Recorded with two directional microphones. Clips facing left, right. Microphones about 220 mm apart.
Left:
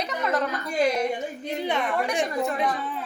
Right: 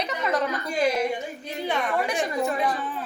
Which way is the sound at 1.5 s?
20° left (ahead or behind).